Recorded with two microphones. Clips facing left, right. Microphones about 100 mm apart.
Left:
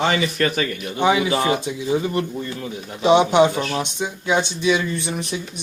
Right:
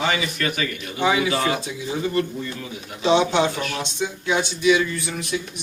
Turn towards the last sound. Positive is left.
turn(degrees=25)  # may be behind; listen again after turning